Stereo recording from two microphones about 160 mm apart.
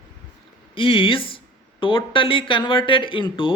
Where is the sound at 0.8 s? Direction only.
35° left (ahead or behind).